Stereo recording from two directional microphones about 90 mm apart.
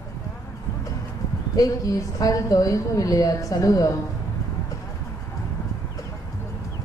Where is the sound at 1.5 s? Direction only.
40° left (ahead or behind).